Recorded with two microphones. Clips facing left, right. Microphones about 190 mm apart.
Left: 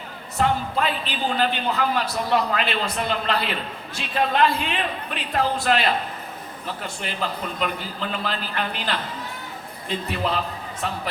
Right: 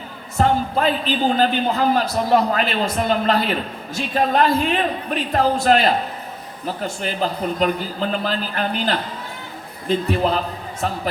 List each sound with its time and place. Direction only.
0.3 s a man's voice: 40° right (ahead or behind)